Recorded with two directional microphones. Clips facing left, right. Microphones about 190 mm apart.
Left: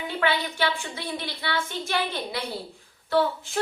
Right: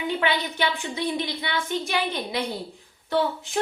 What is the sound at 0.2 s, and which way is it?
A woman's voice, 20° right (ahead or behind).